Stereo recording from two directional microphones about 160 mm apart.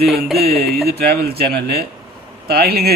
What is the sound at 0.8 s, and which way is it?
Speech, 75° right (ahead or behind).